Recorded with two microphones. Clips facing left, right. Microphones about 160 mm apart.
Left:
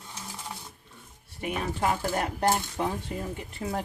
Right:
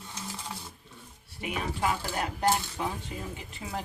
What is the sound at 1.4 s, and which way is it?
Speech, 50° left (ahead or behind).